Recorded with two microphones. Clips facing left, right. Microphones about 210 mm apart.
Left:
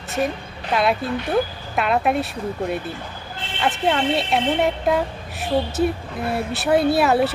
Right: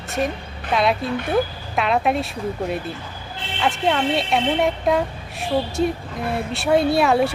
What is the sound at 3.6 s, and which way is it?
Speech, centre (ahead or behind).